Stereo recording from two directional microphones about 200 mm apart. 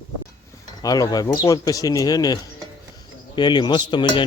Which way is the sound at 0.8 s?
20° left (ahead or behind).